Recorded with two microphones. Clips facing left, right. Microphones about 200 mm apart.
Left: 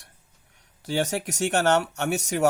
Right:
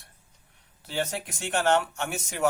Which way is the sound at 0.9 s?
80° left.